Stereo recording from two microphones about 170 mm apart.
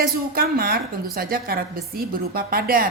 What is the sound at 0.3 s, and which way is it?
A woman's voice, 60° right (ahead or behind).